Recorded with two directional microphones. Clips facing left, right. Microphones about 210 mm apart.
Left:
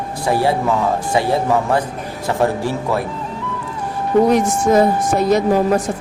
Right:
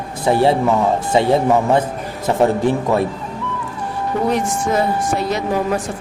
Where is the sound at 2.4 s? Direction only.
20° right (ahead or behind).